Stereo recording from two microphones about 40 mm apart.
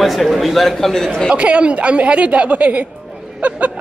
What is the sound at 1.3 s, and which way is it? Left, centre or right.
Speech, right.